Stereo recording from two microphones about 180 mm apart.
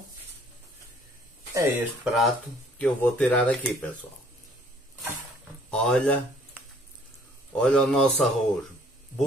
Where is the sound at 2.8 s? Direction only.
5° left (ahead or behind).